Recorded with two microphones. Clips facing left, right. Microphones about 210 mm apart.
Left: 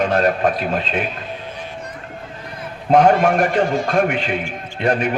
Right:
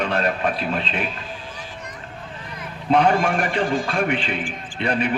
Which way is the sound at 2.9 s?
45° left (ahead or behind).